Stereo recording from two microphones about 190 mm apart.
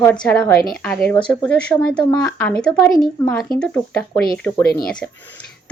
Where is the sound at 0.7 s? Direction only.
5° left (ahead or behind).